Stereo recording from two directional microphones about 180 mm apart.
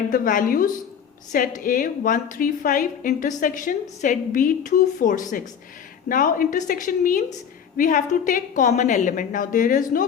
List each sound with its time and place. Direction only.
0.1 s a woman's voice: 50° left (ahead or behind)